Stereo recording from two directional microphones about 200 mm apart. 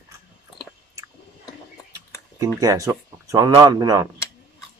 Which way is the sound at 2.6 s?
15° right (ahead or behind).